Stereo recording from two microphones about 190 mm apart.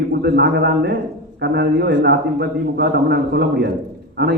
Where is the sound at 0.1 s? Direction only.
60° right (ahead or behind).